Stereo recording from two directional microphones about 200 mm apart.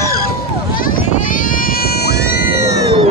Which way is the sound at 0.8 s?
40° left (ahead or behind).